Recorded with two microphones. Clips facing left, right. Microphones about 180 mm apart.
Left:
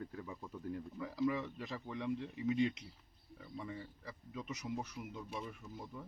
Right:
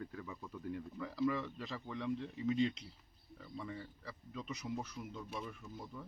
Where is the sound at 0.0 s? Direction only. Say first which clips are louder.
Even; 20° left (ahead or behind).